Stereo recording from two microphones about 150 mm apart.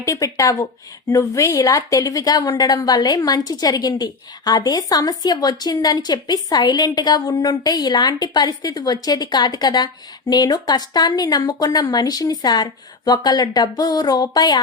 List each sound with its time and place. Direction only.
0.0 s a woman's voice: 20° left (ahead or behind)